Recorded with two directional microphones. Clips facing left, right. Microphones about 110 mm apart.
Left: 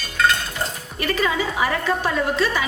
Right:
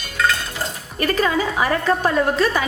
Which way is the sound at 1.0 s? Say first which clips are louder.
Right 3 dB; 40° right (ahead or behind).